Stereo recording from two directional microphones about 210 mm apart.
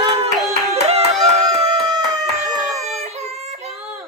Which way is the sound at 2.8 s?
30° right (ahead or behind).